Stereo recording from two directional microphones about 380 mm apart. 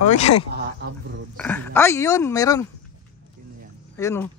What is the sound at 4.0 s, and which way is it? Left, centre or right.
Speech, centre.